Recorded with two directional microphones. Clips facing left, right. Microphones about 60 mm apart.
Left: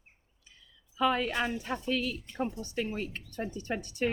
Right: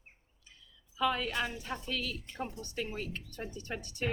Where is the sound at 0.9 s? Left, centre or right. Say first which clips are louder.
Left 3 dB; left.